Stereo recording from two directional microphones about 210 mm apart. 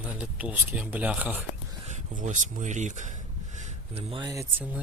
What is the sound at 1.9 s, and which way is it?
Speech, 35° right (ahead or behind).